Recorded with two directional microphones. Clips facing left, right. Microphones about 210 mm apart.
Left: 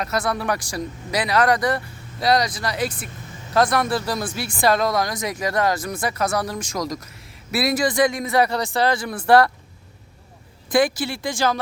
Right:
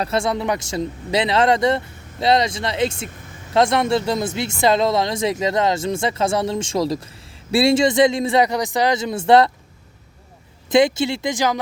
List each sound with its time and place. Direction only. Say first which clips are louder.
0.0 s speech: right 3 dB; 25° right (ahead or behind)
10.7 s speech: right 4 dB; 25° right (ahead or behind)